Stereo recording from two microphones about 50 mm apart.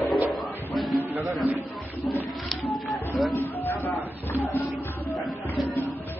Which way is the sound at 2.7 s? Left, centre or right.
Centre.